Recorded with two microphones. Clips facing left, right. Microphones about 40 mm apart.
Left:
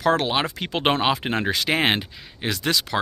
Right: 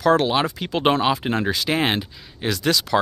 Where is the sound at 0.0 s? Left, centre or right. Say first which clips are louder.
Right 3 dB; left.